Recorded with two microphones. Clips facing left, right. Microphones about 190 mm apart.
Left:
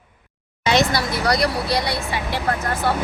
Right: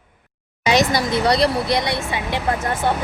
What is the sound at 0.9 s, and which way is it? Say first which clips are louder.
Speech: right 3 dB; 20° right (ahead or behind).